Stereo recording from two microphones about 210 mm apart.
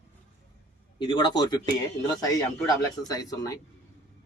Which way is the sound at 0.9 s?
20° left (ahead or behind).